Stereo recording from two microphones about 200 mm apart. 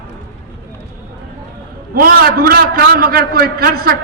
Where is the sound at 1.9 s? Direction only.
45° right (ahead or behind).